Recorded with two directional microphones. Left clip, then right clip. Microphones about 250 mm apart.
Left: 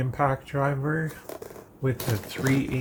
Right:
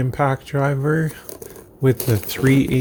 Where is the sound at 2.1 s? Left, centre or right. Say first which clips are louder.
Right 9 dB; right.